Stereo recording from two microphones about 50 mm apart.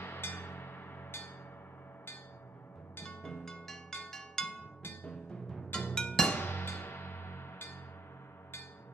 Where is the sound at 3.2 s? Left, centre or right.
Centre.